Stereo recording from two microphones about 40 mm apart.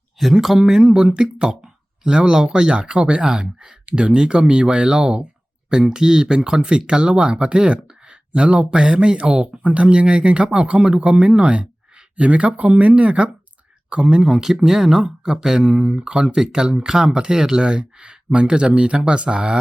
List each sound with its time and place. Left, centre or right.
0.2 s speech: centre
0.9 s speech: right